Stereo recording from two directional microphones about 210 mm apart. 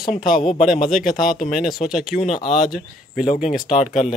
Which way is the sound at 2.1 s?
35° left (ahead or behind).